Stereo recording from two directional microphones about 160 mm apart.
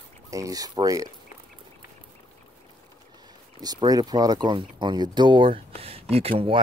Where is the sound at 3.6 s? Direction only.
25° right (ahead or behind).